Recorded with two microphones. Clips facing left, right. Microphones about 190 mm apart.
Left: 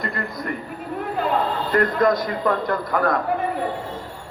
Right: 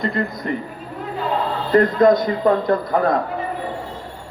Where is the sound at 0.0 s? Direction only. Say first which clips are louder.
Right 5 dB; 25° right (ahead or behind).